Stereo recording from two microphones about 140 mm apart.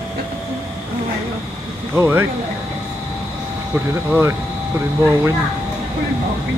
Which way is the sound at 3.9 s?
20° right (ahead or behind).